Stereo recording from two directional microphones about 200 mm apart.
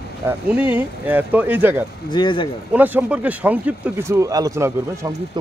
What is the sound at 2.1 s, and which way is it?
Speech, 25° left (ahead or behind).